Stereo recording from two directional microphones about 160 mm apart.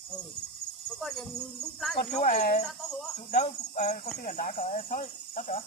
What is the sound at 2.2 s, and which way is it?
Speech, 60° left (ahead or behind).